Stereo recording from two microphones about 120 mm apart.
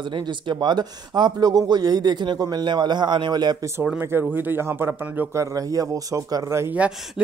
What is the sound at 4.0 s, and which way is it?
Speech, 20° right (ahead or behind).